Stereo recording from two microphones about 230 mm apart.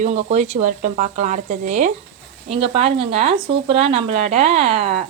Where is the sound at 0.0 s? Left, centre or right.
Right.